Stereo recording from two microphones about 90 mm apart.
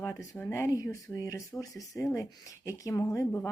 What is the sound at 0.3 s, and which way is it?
Speech, 25° left (ahead or behind).